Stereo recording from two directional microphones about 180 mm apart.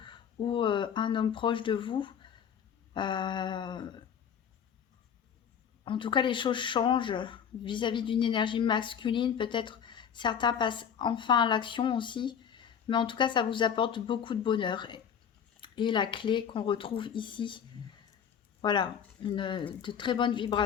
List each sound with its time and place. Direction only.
0.0 s speech: 25° left (ahead or behind)
5.8 s speech: 30° left (ahead or behind)
18.6 s speech: 25° left (ahead or behind)